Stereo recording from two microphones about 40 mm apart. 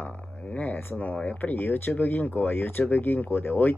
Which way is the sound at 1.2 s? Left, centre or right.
Left.